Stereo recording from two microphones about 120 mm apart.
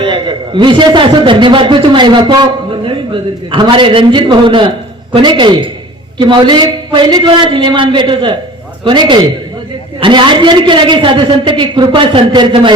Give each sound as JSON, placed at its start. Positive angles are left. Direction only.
{"t": 0.0, "sound": "a man's voice", "side_deg": -45}